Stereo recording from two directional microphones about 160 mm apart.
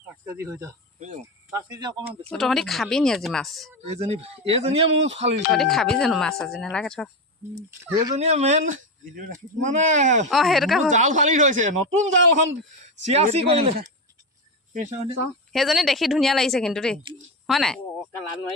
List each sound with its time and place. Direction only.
0.3 s speech: 20° right (ahead or behind)
0.9 s speech: 45° right (ahead or behind)
1.5 s speech: 25° right (ahead or behind)
2.3 s speech: centre (ahead or behind)
3.8 s speech: 40° right (ahead or behind)
5.5 s speech: centre (ahead or behind)
8.2 s speech: 45° right (ahead or behind)
10.2 s speech: centre (ahead or behind)
10.9 s speech: 50° right (ahead or behind)
14.7 s speech: 50° right (ahead or behind)
15.5 s speech: centre (ahead or behind)